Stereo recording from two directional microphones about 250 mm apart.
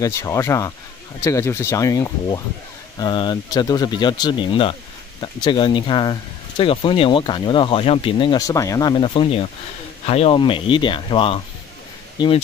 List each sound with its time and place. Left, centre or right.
0.0 s speech: centre